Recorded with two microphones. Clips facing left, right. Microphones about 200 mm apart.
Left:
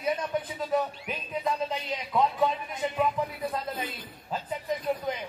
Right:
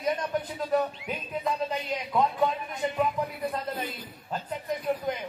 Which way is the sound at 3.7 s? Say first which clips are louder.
Right 1 dB; centre (ahead or behind).